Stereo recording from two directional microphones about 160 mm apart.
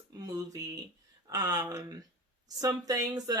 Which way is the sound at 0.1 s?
25° right (ahead or behind).